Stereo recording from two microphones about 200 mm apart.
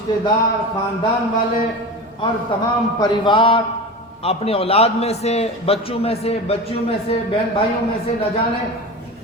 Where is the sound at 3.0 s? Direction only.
25° left (ahead or behind).